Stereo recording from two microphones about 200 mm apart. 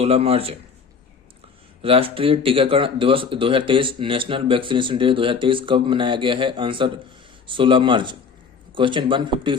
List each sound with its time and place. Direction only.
0.0 s speech: 30° right (ahead or behind)
1.8 s speech: 25° right (ahead or behind)